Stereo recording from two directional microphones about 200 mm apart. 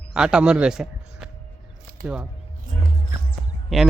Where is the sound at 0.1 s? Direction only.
5° right (ahead or behind).